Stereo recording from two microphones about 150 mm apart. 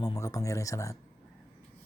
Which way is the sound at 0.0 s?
25° left (ahead or behind).